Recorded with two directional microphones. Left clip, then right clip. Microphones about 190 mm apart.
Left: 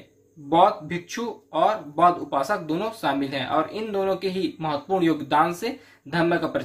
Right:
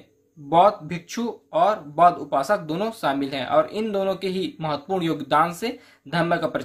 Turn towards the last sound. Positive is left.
turn(degrees=-40)  # may be behind; listen again after turning